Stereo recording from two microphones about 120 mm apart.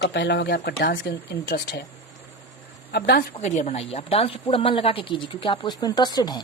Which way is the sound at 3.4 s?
75° left (ahead or behind).